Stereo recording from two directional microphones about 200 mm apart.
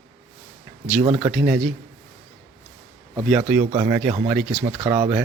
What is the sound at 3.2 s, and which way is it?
Speech, 5° right (ahead or behind).